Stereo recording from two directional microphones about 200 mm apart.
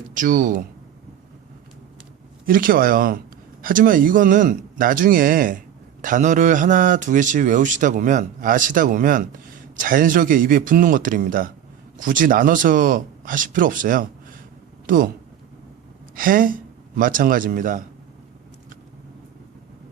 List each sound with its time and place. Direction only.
0.1 s speech: 40° right (ahead or behind)
2.5 s speech: 45° right (ahead or behind)
16.1 s speech: 45° right (ahead or behind)